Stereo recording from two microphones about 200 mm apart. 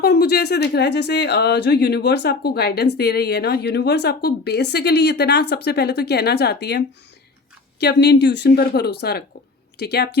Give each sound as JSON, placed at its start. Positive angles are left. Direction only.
{"t": 0.0, "sound": "speech", "side_deg": 50}